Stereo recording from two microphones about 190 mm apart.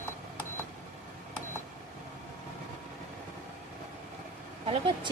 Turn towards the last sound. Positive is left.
turn(degrees=-30)  # may be behind; listen again after turning